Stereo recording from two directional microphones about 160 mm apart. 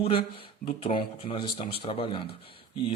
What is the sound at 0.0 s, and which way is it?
A man's voice, 35° left (ahead or behind).